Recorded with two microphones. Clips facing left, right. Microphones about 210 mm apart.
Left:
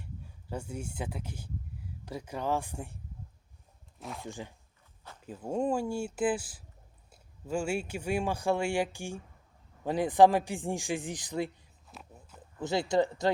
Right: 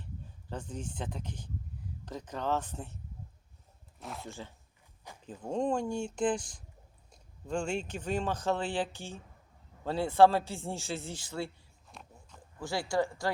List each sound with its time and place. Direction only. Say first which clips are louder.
0.5 s speech: left 2 dB; 10° left (ahead or behind)
4.0 s speech: left 1 dB; centre (ahead or behind)
4.3 s speech: left 3 dB; 15° left (ahead or behind)
11.9 s a sound: left 2 dB; 5° left (ahead or behind)
12.5 s speech: left 4 dB; 20° left (ahead or behind)